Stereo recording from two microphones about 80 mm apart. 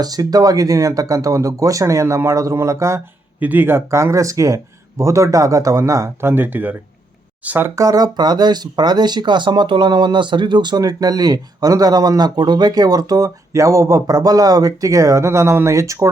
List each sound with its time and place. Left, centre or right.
0.0 s speech: right
3.4 s speech: right
6.3 s speech: right
7.8 s speech: right